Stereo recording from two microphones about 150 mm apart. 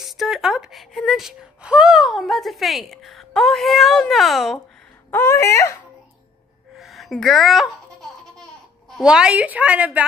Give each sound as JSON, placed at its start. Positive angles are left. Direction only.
{"t": 0.0, "sound": "speech", "side_deg": 0}
{"t": 5.1, "sound": "speech", "side_deg": 15}
{"t": 6.7, "sound": "baby laughter", "side_deg": 0}
{"t": 8.9, "sound": "a woman's voice", "side_deg": -5}